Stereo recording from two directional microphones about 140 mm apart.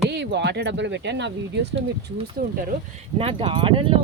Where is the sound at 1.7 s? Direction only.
45° right (ahead or behind).